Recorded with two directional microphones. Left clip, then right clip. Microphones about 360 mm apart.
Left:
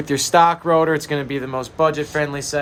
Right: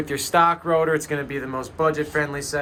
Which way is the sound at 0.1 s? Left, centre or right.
Left.